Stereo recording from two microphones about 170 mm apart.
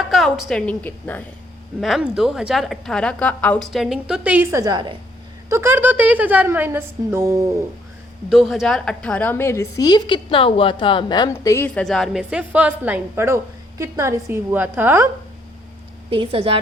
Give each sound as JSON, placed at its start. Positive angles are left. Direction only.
{"t": 0.1, "sound": "a woman's voice", "side_deg": 0}
{"t": 1.8, "sound": "a woman's voice", "side_deg": -5}
{"t": 4.6, "sound": "a woman's voice", "side_deg": -25}
{"t": 5.5, "sound": "a woman's voice", "side_deg": -15}
{"t": 8.3, "sound": "a woman's voice", "side_deg": 0}
{"t": 16.0, "sound": "a woman's voice", "side_deg": -30}